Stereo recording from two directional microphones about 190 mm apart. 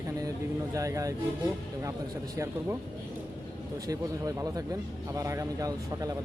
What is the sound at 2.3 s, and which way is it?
Speech, 15° right (ahead or behind).